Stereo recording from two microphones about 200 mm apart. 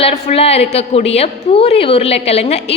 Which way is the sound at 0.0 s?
30° left (ahead or behind).